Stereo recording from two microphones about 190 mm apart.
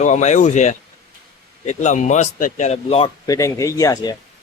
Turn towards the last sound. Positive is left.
turn(degrees=20)  # may be behind; listen again after turning